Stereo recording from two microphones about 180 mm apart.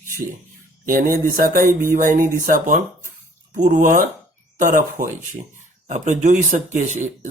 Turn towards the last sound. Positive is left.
turn(degrees=-40)  # may be behind; listen again after turning